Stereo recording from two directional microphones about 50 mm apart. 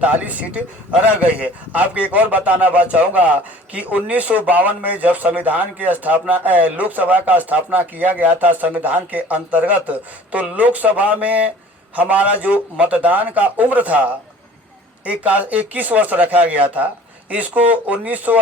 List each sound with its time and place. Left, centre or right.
0.0 s a man's voice: right